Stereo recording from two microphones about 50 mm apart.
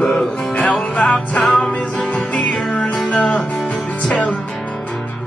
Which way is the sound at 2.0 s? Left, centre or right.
Left.